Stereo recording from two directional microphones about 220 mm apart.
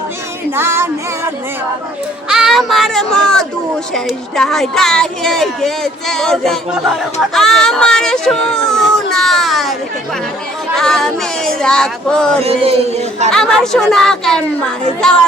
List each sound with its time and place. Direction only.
0.5 s music: 10° right (ahead or behind)
2.3 s speech: centre (ahead or behind)
10.8 s speech: centre (ahead or behind)
12.4 s speech: 25° right (ahead or behind)
13.3 s speech: 5° left (ahead or behind)